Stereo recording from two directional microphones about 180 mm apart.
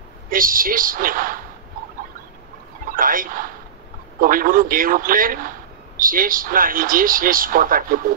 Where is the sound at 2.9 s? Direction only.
50° right (ahead or behind).